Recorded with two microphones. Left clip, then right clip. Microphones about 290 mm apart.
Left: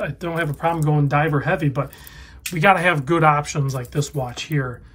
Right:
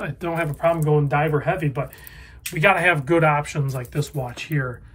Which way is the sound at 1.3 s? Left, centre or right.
Left.